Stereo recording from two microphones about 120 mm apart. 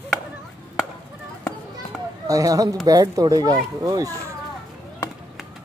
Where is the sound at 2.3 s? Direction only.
30° right (ahead or behind).